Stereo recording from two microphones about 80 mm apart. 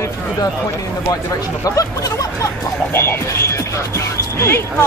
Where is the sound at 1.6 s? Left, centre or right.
Left.